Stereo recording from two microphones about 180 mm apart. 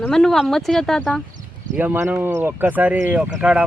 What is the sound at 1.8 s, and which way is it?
Speech, 10° right (ahead or behind).